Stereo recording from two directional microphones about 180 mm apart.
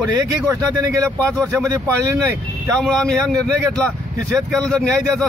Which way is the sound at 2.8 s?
5° left (ahead or behind).